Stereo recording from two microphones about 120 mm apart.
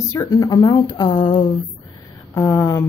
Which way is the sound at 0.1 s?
25° left (ahead or behind).